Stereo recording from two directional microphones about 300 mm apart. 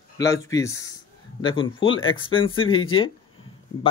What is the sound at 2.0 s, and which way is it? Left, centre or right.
Speech, left.